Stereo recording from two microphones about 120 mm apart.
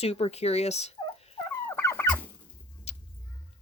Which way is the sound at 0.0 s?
60° left (ahead or behind).